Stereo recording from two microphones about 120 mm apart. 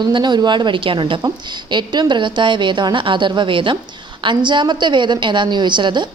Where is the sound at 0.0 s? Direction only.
40° right (ahead or behind).